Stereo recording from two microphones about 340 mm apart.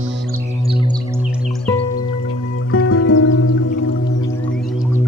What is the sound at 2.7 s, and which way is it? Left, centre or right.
Music, left.